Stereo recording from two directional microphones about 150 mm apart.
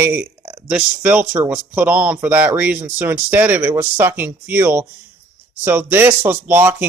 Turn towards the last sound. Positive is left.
turn(degrees=-10)  # may be behind; listen again after turning